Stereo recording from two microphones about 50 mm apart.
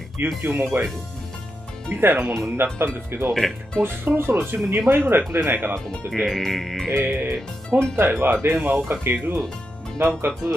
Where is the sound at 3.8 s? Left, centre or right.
Right.